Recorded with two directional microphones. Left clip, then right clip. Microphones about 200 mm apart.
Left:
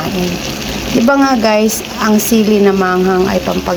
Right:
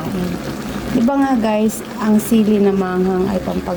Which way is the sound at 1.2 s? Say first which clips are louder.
Left 6 dB; 5° right (ahead or behind).